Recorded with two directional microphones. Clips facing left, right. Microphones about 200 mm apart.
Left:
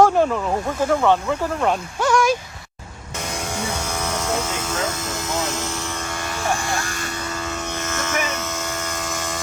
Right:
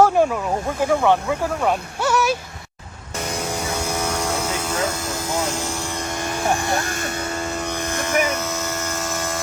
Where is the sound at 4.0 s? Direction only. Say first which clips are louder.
Left 2 dB; 10° right (ahead or behind).